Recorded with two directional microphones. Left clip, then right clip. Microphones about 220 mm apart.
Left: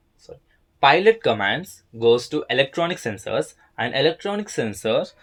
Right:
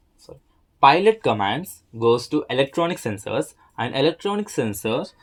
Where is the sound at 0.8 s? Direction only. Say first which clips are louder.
Even; 25° right (ahead or behind).